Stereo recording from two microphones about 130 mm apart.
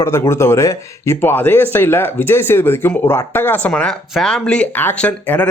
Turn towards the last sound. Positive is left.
turn(degrees=10)  # may be behind; listen again after turning